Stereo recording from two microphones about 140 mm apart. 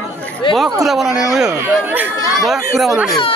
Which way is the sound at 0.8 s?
Centre (ahead or behind).